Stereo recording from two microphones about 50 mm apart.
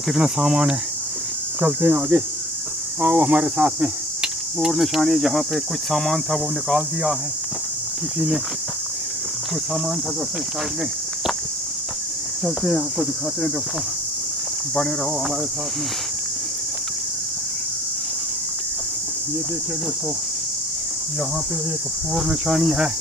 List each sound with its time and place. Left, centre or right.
0.1 s speech: centre
1.6 s speech: right
3.4 s speech: right; by 7.2 s centre
12.7 s speech: centre
22.5 s speech: centre